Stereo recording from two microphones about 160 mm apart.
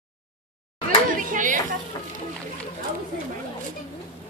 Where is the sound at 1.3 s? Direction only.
55° right (ahead or behind).